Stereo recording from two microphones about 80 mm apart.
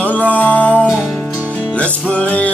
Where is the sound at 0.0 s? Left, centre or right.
Centre.